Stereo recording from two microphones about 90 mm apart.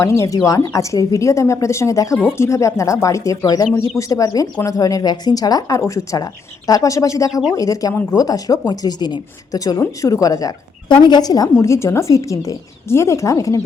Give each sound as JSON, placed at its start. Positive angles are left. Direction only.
{"t": 0.0, "sound": "speech", "side_deg": 30}
{"t": 10.8, "sound": "speech", "side_deg": 55}
{"t": 11.6, "sound": "speech", "side_deg": 35}